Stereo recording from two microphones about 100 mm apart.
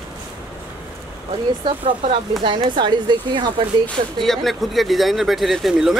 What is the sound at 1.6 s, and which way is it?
Speech, 60° right (ahead or behind).